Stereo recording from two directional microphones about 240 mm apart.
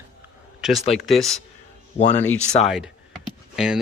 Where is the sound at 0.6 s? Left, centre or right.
Centre.